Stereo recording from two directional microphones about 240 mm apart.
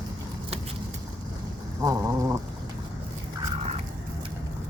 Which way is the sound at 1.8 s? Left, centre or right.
Centre.